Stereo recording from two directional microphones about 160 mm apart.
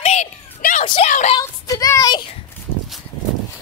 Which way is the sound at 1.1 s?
50° left (ahead or behind).